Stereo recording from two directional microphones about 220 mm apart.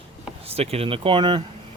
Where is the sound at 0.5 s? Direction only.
25° right (ahead or behind).